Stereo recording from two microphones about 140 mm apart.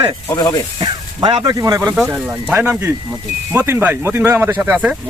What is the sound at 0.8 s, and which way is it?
Speech, 35° right (ahead or behind).